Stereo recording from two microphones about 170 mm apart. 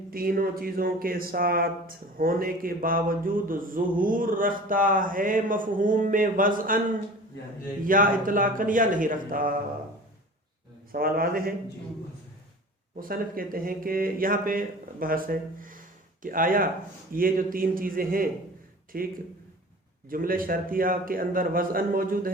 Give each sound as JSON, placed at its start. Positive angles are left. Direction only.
{"t": 0.1, "sound": "speech", "side_deg": -60}
{"t": 7.9, "sound": "speech", "side_deg": -55}
{"t": 10.9, "sound": "speech", "side_deg": -60}
{"t": 13.0, "sound": "speech", "side_deg": -55}